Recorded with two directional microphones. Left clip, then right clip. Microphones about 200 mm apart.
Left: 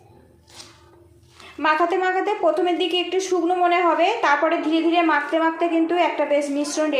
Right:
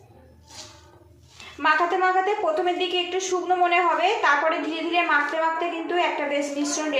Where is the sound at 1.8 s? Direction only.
45° left (ahead or behind).